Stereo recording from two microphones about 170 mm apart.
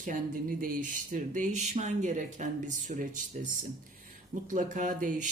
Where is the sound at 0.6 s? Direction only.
50° right (ahead or behind).